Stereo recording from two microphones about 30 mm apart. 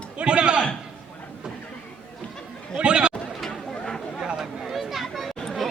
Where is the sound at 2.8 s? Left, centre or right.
Right.